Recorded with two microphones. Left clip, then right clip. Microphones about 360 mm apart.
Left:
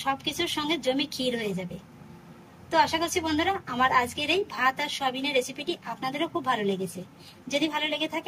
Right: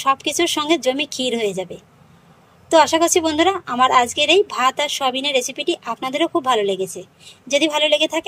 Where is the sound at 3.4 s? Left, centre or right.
Centre.